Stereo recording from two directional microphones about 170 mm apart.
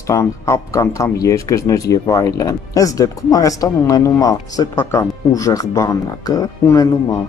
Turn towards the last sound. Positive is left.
turn(degrees=20)  # may be behind; listen again after turning